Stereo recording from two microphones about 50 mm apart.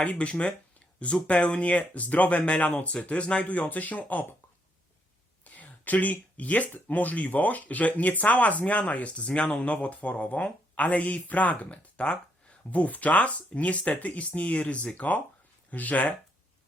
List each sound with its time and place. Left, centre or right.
0.0 s speech: left
5.5 s speech: left